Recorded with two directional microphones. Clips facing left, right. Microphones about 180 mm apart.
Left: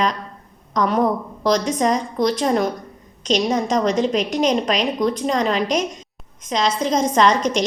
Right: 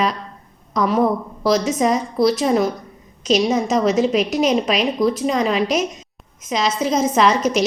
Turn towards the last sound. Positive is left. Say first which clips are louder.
# right 1 dB
turn(degrees=-5)  # may be behind; listen again after turning